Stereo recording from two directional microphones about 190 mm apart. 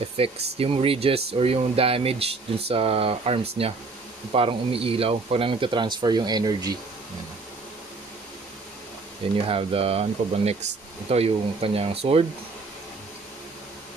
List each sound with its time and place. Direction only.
0.2 s speech: 30° right (ahead or behind)
9.5 s speech: 30° right (ahead or behind)